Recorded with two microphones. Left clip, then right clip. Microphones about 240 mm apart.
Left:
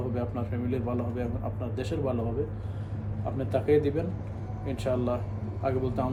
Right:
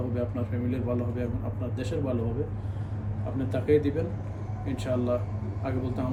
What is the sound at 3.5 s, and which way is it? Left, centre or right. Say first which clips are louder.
A man's voice: even; centre.